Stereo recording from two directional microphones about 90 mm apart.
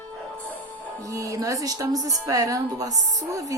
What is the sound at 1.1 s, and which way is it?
Speech, 40° right (ahead or behind).